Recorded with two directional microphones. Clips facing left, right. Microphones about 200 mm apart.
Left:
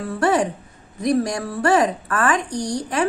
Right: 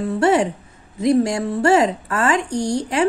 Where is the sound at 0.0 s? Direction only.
25° right (ahead or behind).